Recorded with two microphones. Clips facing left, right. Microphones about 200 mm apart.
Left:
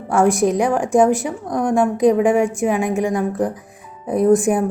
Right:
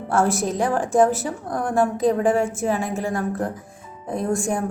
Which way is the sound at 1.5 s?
Centre (ahead or behind).